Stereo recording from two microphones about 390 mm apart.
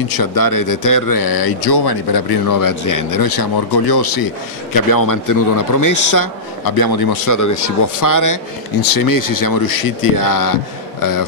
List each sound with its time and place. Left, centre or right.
0.1 s speech: left
4.7 s speech: left
6.1 s speech: left
7.3 s speech: left